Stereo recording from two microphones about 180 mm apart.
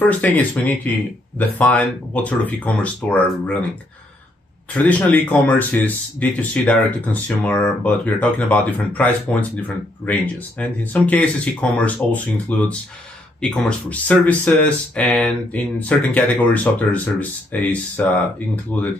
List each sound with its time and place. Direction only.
0.0 s speech: 10° left (ahead or behind)
4.7 s speech: 10° left (ahead or behind)